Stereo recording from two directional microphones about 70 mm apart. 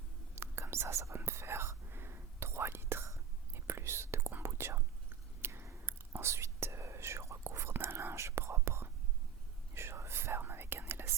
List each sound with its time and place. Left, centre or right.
0.3 s whispering: right
4.3 s whispering: right